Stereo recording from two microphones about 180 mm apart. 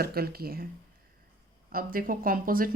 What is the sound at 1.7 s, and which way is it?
Speech, 50° right (ahead or behind).